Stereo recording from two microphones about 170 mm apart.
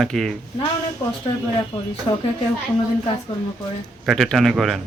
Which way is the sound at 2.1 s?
25° left (ahead or behind).